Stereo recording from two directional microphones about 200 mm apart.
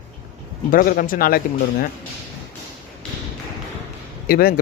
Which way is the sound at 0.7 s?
45° left (ahead or behind).